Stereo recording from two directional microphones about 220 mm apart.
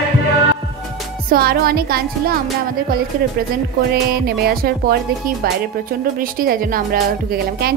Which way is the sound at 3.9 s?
45° right (ahead or behind).